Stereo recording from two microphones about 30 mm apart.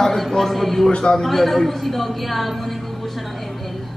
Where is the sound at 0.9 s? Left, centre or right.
Left.